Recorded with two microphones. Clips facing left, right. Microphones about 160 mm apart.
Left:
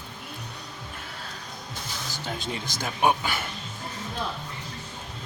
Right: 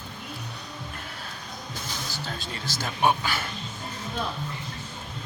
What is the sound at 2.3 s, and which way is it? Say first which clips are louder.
Speech: left 2 dB; 20° left (ahead or behind).